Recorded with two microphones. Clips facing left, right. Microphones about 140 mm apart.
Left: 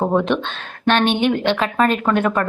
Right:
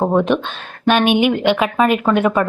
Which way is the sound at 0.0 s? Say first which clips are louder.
Right 2 dB; 10° right (ahead or behind).